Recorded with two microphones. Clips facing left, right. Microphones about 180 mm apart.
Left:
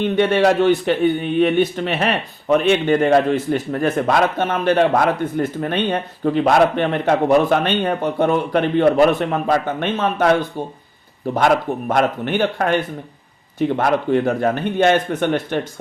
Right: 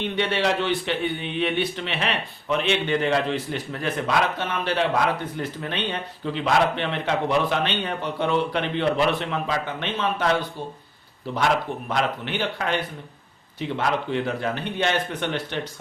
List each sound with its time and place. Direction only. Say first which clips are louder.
0.0 s a man's voice: left 8 dB; 50° left (ahead or behind)
11.3 s a man's voice: left 6 dB; 50° left (ahead or behind)